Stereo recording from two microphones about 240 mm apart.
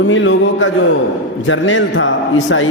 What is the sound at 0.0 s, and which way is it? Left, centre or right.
A man's voice, left.